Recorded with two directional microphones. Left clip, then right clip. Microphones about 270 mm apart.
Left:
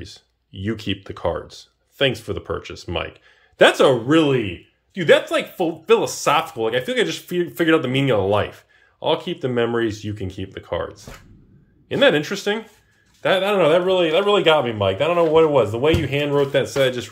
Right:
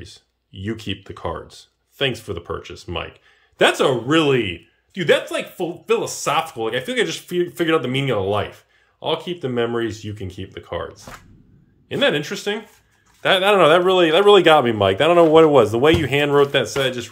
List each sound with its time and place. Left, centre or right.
0.0 s speech: centre
16.6 s speech: centre